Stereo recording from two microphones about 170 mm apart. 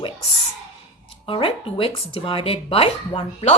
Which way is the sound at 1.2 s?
30° left (ahead or behind).